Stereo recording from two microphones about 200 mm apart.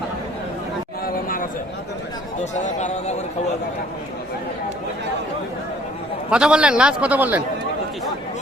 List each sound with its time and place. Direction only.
1.0 s a sound: 45° left (ahead or behind)
2.4 s a man's voice: 35° left (ahead or behind)
6.3 s a man's voice: 5° right (ahead or behind)